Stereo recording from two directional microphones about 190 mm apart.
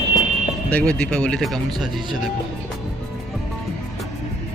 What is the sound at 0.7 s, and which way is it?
Speech, 5° left (ahead or behind).